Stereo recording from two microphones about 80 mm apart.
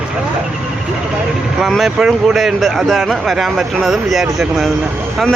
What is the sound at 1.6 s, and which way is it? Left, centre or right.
Speech, centre.